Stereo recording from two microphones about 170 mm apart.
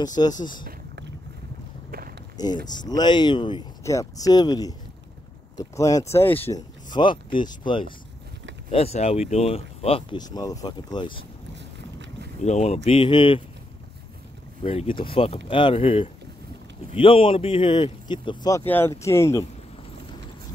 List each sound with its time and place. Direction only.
0.0 s speech: 25° left (ahead or behind)
1.9 s a sound: 60° right (ahead or behind)
2.3 s speech: 25° left (ahead or behind)
6.9 s speech: 30° left (ahead or behind)
12.4 s speech: 40° left (ahead or behind)
14.6 s speech: 35° left (ahead or behind)
18.7 s speech: 15° left (ahead or behind)